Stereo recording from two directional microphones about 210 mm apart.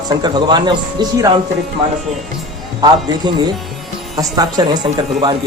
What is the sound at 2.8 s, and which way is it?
Speech, 20° right (ahead or behind).